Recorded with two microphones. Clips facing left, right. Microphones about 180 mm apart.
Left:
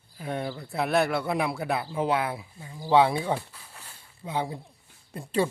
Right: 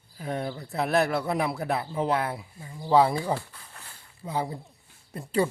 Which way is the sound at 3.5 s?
10° left (ahead or behind).